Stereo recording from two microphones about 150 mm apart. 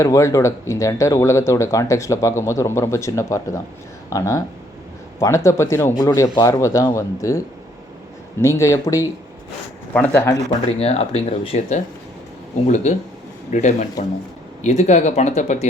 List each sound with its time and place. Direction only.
0.0 s speech: 20° left (ahead or behind)
10.7 s speech: 45° left (ahead or behind)
12.6 s speech: 55° left (ahead or behind)